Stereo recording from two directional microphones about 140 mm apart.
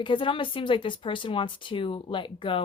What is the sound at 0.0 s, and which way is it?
Speech, 35° left (ahead or behind).